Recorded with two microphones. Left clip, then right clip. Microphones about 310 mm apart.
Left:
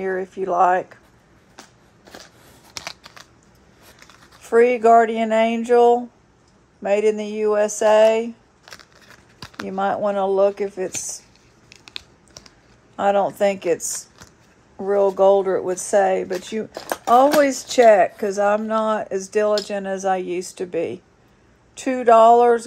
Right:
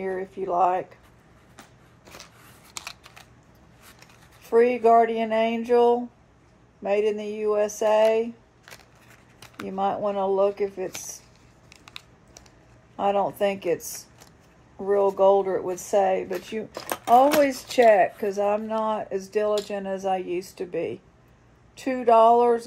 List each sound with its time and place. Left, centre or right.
0.0 s speech: left
2.7 s typing: left
4.4 s speech: left
11.7 s a sound: left
14.9 s speech: left
17.9 s speech: left